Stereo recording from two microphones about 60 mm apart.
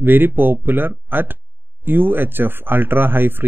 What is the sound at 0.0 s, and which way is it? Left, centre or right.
Speech, right.